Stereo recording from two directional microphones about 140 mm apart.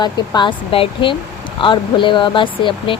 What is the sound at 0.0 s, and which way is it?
A woman's voice, 35° left (ahead or behind).